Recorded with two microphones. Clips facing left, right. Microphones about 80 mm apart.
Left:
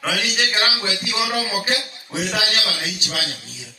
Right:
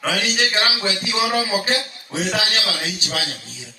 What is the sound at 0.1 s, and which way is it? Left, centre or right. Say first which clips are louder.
A man's voice: right 1 dB; right.